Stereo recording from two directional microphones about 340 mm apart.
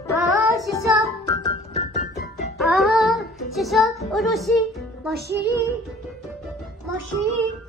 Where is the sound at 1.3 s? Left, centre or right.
Centre.